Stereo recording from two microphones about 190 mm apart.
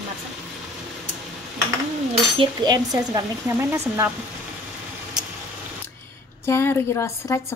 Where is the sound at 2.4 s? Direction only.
20° right (ahead or behind).